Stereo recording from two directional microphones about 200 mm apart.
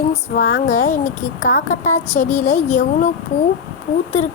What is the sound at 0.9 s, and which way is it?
A woman's voice, 40° left (ahead or behind).